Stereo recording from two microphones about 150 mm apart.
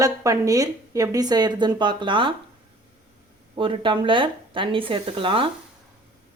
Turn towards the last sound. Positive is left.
turn(degrees=-35)  # may be behind; listen again after turning